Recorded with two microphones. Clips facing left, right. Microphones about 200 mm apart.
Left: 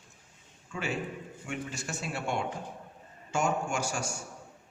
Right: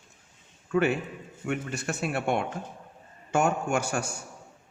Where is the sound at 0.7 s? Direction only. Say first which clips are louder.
Right 9 dB; 60° right (ahead or behind).